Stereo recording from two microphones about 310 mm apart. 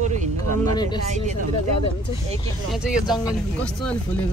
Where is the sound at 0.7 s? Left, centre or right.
Centre.